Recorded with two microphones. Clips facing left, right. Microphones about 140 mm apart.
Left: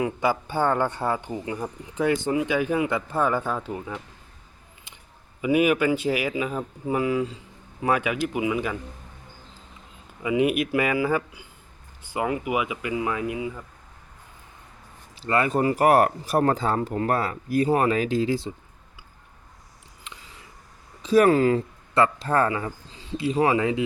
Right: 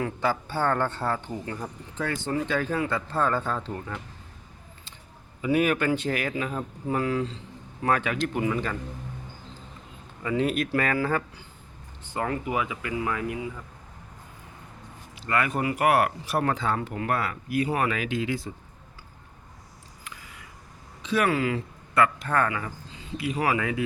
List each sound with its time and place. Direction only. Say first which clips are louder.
0.0 s speech: left 3 dB; 10° left (ahead or behind)
5.4 s speech: left 3 dB; 10° left (ahead or behind)
10.2 s speech: left 3 dB; 10° left (ahead or behind)
15.1 s speech: left 4 dB; 30° left (ahead or behind)
20.1 s a sound: even; 25° left (ahead or behind)
21.0 s speech: left 7 dB; 40° left (ahead or behind)